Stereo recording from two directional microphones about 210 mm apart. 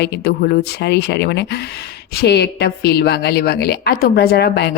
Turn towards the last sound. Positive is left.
turn(degrees=50)  # may be behind; listen again after turning